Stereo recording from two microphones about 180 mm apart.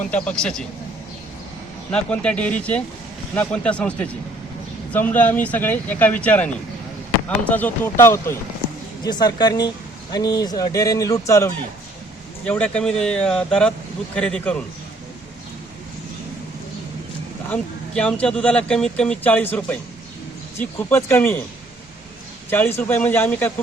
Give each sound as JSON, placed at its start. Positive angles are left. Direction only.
{"t": 0.1, "sound": "speech", "side_deg": 5}
{"t": 1.9, "sound": "speech", "side_deg": 5}
{"t": 17.5, "sound": "speech", "side_deg": 5}
{"t": 22.4, "sound": "speech", "side_deg": 10}